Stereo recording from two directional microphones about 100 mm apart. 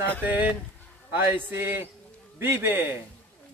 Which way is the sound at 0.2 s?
15° right (ahead or behind).